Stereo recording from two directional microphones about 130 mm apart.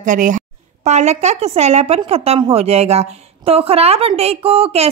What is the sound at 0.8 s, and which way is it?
A woman's voice, 60° right (ahead or behind).